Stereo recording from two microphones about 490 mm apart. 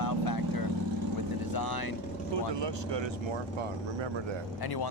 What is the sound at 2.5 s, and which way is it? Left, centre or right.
Speech, right.